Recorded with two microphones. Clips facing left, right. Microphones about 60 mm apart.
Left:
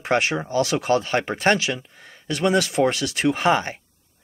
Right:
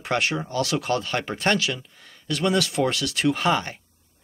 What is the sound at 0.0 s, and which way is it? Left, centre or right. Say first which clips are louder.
Speech: left 3 dB; left.